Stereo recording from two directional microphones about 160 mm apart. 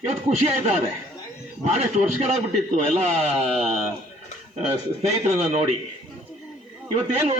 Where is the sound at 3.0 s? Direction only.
40° right (ahead or behind).